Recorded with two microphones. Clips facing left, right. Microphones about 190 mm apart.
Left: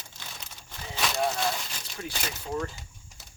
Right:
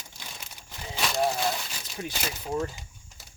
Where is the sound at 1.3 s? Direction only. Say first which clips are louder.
Right 1 dB; 15° right (ahead or behind).